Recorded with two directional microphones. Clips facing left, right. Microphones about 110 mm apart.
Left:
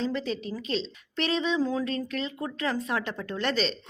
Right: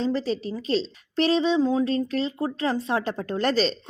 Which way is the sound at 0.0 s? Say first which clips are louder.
Right 4 dB; 35° right (ahead or behind).